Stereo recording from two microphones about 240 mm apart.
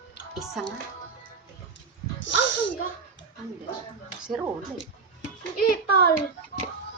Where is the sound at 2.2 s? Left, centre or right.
Left.